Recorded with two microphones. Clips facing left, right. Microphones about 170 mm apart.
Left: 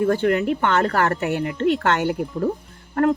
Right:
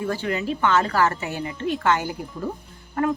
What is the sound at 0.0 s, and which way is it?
Speech, 55° left (ahead or behind).